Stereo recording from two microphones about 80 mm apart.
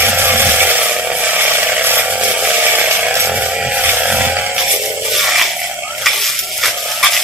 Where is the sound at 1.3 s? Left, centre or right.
Right.